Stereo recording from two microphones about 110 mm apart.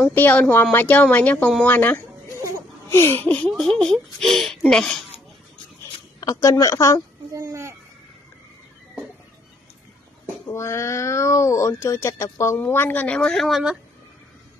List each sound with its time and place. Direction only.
0.1 s speech: 15° left (ahead or behind)
6.2 s a woman's voice: 30° left (ahead or behind)
7.3 s a sound: 25° right (ahead or behind)
10.5 s speech: 25° left (ahead or behind); by 13.7 s centre (ahead or behind)